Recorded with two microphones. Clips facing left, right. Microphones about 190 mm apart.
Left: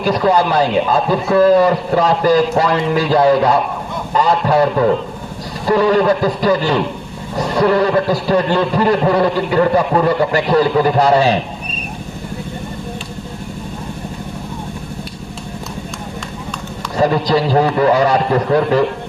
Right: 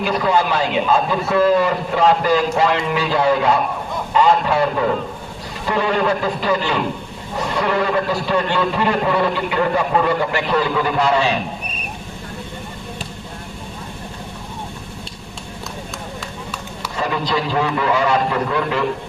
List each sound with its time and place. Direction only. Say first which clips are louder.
0.0 s a man's voice: left 4 dB; 40° left (ahead or behind)
17.0 s a man's voice: left 7 dB; 40° left (ahead or behind)